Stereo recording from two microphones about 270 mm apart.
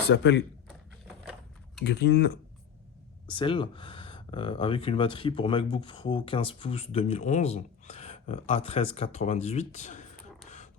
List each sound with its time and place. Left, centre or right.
0.0 s speech: left
1.0 s a sound: centre
1.8 s speech: left
3.2 s speech: centre